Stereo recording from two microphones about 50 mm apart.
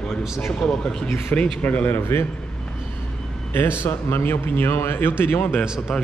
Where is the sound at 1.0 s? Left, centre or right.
Left.